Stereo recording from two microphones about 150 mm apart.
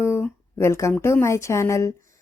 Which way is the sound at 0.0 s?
15° left (ahead or behind).